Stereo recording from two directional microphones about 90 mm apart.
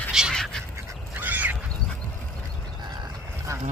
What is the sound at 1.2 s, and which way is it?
Duck, 20° right (ahead or behind).